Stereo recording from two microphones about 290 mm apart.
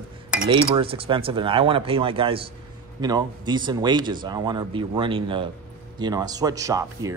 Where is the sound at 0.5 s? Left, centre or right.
Centre.